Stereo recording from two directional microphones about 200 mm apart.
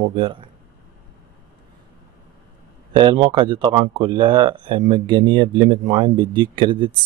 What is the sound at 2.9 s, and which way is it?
Speech, 25° right (ahead or behind).